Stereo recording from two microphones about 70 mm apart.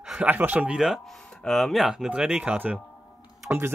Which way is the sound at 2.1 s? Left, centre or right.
Centre.